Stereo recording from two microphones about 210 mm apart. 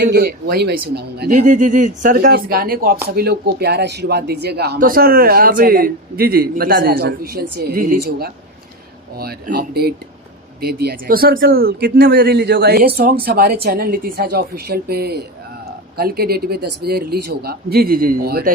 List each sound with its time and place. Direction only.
0.0 s a man's voice: 55° right (ahead or behind)